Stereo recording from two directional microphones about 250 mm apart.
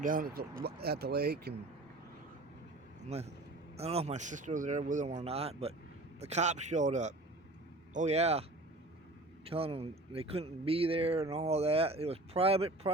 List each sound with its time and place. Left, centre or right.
0.0 s speech: right
3.1 s speech: right